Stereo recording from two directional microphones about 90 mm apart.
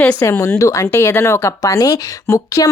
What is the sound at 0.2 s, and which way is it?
Speech, 35° left (ahead or behind).